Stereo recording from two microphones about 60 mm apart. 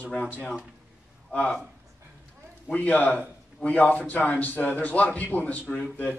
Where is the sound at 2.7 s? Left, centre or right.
Left.